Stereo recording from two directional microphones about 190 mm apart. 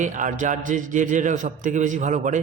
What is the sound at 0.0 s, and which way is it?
A man's voice, 40° right (ahead or behind).